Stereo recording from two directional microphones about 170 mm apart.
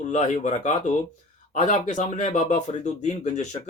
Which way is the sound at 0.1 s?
45° left (ahead or behind).